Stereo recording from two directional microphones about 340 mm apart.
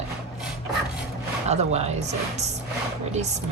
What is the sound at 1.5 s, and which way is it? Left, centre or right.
Speech, centre.